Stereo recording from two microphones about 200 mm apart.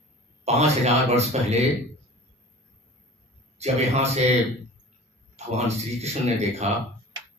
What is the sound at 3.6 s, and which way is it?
Speech, 35° right (ahead or behind).